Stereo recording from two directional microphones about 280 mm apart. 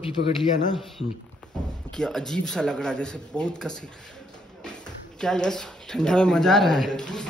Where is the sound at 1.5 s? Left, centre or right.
Centre.